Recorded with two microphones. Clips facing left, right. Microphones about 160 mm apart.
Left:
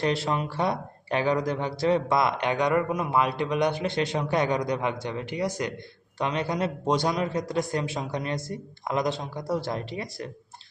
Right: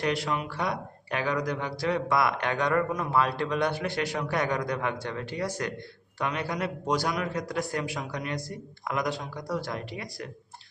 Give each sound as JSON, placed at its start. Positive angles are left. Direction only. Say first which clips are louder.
{"t": 0.0, "sound": "speech", "louder": "left 3 dB", "side_deg": 30}